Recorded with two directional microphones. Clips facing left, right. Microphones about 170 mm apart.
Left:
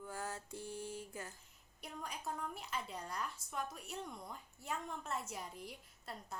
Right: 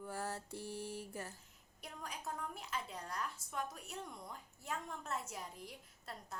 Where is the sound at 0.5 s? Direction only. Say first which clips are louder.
Right 1 dB; centre (ahead or behind).